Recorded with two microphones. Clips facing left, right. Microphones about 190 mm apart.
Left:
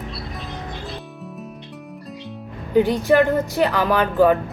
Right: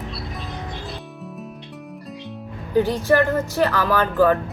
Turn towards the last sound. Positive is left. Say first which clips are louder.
# left 1 dB
turn(degrees=15)  # may be behind; listen again after turning